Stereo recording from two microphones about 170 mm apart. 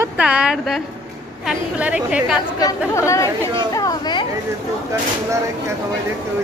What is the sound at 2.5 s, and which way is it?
Speech, 20° left (ahead or behind).